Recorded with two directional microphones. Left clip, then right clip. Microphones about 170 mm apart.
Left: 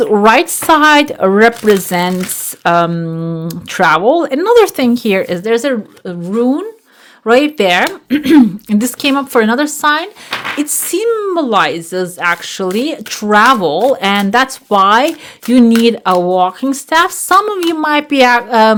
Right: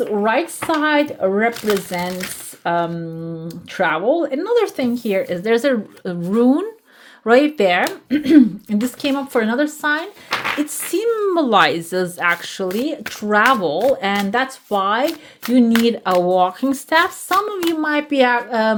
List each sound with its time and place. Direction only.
0.0 s speech: 50° left (ahead or behind); by 5.4 s 35° left (ahead or behind)
5.4 s speech: 15° left (ahead or behind)
7.3 s speech: 15° left (ahead or behind)
8.1 s a woman's voice: 35° left (ahead or behind)
10.9 s a woman's voice: 20° left (ahead or behind); by 15.0 s 40° left (ahead or behind)
15.8 s a woman's voice: 25° left (ahead or behind)
17.2 s a woman's voice: 35° left (ahead or behind)